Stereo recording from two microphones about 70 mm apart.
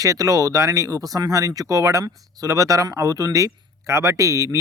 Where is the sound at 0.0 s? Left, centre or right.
Right.